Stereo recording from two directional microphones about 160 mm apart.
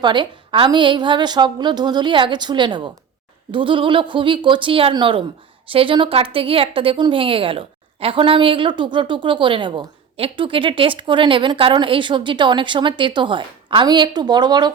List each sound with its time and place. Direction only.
0.0 s a woman's voice: 30° right (ahead or behind)